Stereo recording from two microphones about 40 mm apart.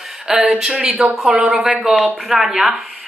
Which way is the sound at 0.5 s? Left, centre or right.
Centre.